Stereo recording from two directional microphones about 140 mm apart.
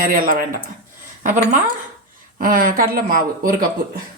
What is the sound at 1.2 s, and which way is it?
Speech, 60° right (ahead or behind).